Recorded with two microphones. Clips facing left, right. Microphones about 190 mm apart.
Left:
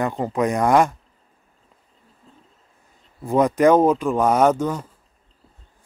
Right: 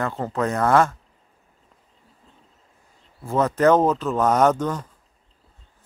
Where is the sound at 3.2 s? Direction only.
15° left (ahead or behind).